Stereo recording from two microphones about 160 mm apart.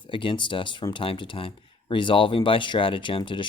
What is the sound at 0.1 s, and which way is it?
Speech, 30° left (ahead or behind).